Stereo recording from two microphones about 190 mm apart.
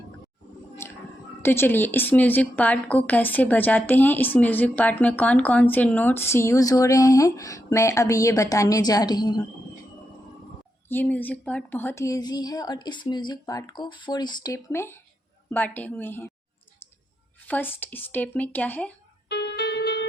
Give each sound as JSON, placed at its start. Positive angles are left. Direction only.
{"t": 0.8, "sound": "a sound", "side_deg": 10}
{"t": 1.4, "sound": "a woman's voice", "side_deg": 10}
{"t": 10.8, "sound": "a woman's voice", "side_deg": 10}
{"t": 17.4, "sound": "a woman's voice", "side_deg": 10}
{"t": 19.3, "sound": "music", "side_deg": 60}